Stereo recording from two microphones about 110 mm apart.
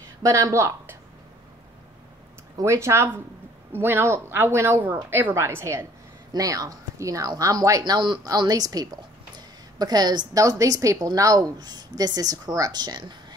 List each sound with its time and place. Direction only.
0.2 s a woman's voice: 30° right (ahead or behind)
2.5 s speech: 25° right (ahead or behind)